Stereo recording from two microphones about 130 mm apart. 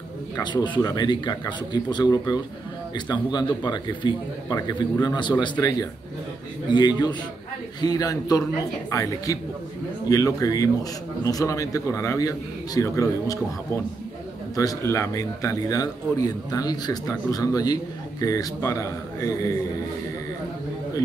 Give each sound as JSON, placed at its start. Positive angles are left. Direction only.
{"t": 0.4, "sound": "a man's voice", "side_deg": 35}
{"t": 7.8, "sound": "a man's voice", "side_deg": 30}
{"t": 14.5, "sound": "a man's voice", "side_deg": 25}